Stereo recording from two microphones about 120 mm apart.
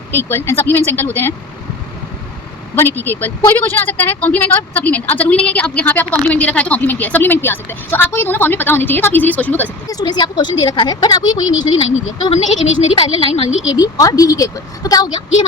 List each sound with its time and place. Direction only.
0.1 s a woman's voice: 15° left (ahead or behind)
2.7 s a woman's voice: 20° left (ahead or behind)
9.9 s speech: 35° left (ahead or behind)
12.3 s speech: 65° left (ahead or behind)
13.1 s speech: 55° left (ahead or behind)
13.7 s speech: 30° left (ahead or behind)